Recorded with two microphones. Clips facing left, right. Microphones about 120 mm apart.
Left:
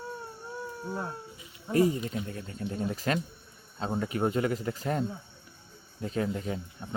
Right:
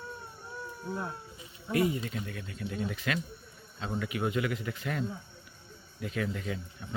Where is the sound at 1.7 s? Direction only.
35° left (ahead or behind).